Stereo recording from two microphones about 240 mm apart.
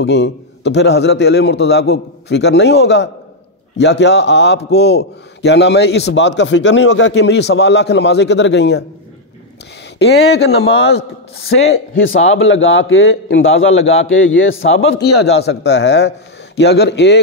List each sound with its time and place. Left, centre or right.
0.0 s a man's voice: left
9.9 s a man's voice: left